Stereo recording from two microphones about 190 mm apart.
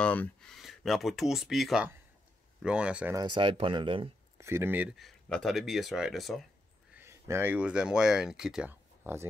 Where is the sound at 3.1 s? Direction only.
25° right (ahead or behind).